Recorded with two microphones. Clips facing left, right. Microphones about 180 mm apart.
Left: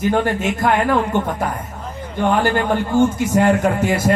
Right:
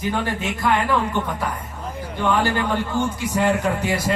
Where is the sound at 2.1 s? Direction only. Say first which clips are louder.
Left 4 dB; 45° left (ahead or behind).